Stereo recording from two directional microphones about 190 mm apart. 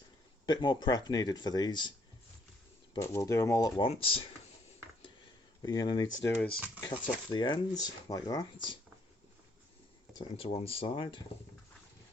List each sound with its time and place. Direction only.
0.4 s speech: 25° left (ahead or behind)
2.9 s speech: 15° left (ahead or behind)
3.8 s speech: 30° left (ahead or behind)
5.6 s speech: 25° left (ahead or behind)
6.2 s speech: 10° left (ahead or behind)
6.8 s speech: 25° left (ahead or behind)
10.2 s speech: 30° left (ahead or behind)